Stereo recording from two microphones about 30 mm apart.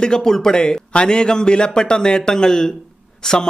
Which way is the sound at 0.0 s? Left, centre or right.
Left.